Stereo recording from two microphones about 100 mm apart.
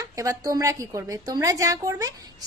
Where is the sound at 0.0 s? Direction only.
35° right (ahead or behind).